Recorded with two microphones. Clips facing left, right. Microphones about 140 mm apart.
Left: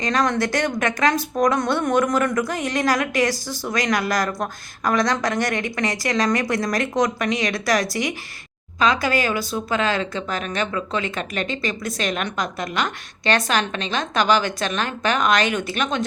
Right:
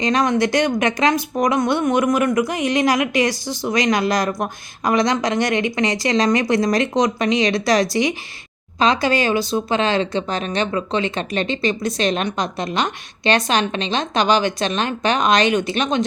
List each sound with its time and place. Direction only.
0.0 s speech: 20° right (ahead or behind)